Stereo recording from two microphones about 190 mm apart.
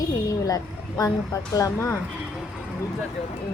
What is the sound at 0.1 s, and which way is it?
A woman's voice, 20° left (ahead or behind).